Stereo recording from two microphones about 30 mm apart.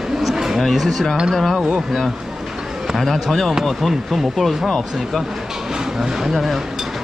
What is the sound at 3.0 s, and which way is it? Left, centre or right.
Speech, centre.